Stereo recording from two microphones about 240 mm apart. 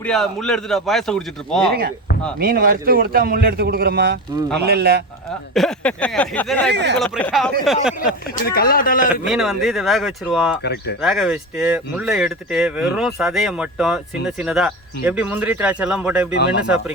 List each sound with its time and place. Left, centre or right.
0.0 s speech: centre
2.4 s a man's voice: right
5.5 s speech: centre
6.7 s speech: right
7.0 s speech: centre
8.4 s speech: left
9.2 s speech: centre
10.6 s speech: left
11.0 s speech: centre